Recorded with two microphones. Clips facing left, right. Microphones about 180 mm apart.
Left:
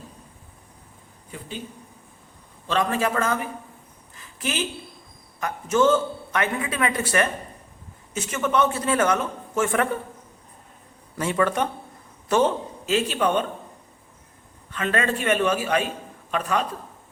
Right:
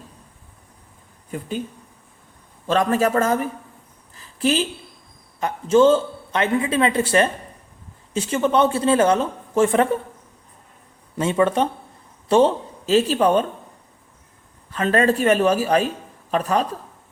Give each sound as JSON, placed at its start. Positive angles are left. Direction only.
{"t": 1.3, "sound": "speech", "side_deg": -45}
{"t": 2.6, "sound": "a man's voice", "side_deg": -40}
{"t": 4.1, "sound": "a sound", "side_deg": -35}
{"t": 5.4, "sound": "a woman's voice", "side_deg": -30}
{"t": 11.2, "sound": "a woman's voice", "side_deg": -25}
{"t": 14.7, "sound": "a man's voice", "side_deg": -35}